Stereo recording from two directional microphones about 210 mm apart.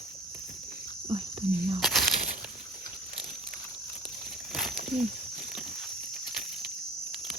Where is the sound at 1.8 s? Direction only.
5° right (ahead or behind).